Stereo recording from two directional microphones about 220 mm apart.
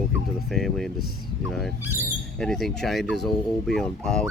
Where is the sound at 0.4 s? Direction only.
Centre (ahead or behind).